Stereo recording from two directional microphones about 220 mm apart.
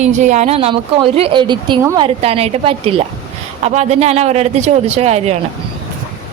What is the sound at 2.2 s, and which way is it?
Speech, 25° right (ahead or behind).